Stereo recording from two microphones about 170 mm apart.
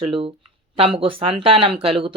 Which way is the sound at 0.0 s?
35° right (ahead or behind).